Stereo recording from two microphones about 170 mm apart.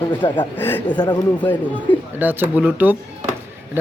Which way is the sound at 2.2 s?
10° right (ahead or behind).